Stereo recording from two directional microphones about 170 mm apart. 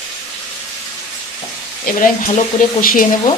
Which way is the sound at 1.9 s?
50° left (ahead or behind).